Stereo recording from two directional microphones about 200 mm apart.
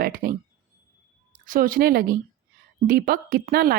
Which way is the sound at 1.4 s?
45° right (ahead or behind).